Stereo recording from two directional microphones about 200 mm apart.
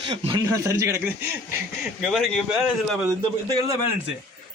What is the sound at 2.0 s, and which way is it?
Speech, centre (ahead or behind).